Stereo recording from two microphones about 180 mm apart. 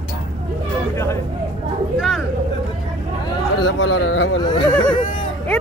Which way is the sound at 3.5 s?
90° left.